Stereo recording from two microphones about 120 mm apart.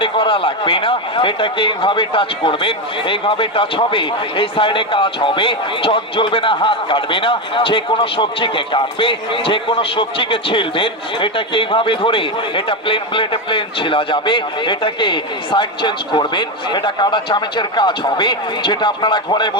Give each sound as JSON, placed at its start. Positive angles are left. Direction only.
{"t": 0.0, "sound": "a man's voice", "side_deg": 45}